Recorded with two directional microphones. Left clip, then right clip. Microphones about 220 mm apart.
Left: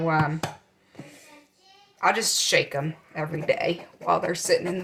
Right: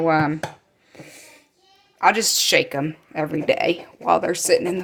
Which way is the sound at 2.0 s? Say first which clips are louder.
Right 5 dB; 45° right (ahead or behind).